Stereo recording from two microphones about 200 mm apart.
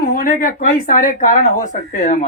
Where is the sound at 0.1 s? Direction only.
40° left (ahead or behind).